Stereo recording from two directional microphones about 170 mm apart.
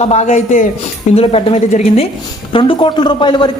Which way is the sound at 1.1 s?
35° left (ahead or behind).